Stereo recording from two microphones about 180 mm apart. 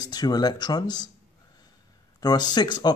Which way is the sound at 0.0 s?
20° left (ahead or behind).